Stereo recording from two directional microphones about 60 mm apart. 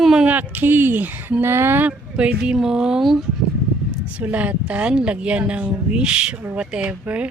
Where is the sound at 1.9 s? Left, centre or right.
Centre.